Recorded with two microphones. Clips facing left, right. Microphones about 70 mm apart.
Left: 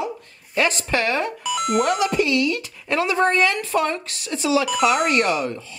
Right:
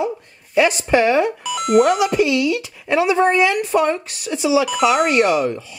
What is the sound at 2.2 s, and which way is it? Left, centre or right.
Speech, centre.